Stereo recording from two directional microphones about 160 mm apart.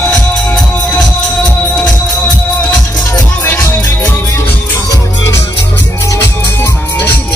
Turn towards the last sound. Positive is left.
turn(degrees=10)  # may be behind; listen again after turning